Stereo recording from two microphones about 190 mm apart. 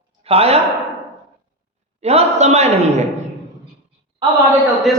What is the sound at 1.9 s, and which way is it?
A man's voice, 35° right (ahead or behind).